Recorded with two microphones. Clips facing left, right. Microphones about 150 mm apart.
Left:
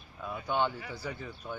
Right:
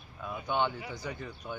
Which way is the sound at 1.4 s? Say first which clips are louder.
Even; 5° right (ahead or behind).